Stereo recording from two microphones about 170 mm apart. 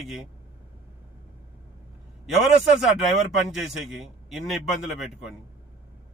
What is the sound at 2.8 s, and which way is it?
A man's voice, centre (ahead or behind).